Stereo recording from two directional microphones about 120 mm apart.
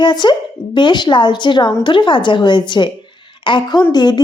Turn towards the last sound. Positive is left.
turn(degrees=35)  # may be behind; listen again after turning